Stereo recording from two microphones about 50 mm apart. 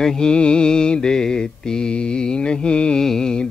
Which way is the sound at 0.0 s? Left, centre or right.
Centre.